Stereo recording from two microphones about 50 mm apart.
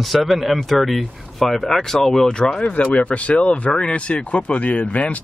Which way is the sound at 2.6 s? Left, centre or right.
Left.